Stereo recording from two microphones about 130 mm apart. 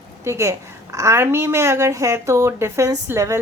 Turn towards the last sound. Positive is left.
turn(degrees=-20)  # may be behind; listen again after turning